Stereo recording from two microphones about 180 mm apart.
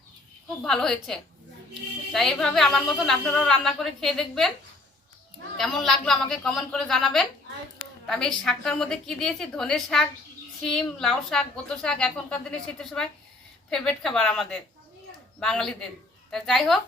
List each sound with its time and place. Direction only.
0.6 s a woman's voice: centre (ahead or behind)
5.5 s a woman's voice: centre (ahead or behind)